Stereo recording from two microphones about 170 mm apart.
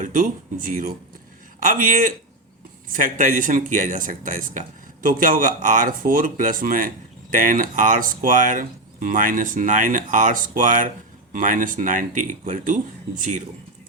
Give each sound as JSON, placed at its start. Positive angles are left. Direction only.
{"t": 0.0, "sound": "a man's voice", "side_deg": -50}